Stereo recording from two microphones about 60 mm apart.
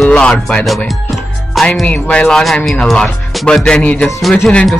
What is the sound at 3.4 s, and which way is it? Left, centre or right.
Music, centre.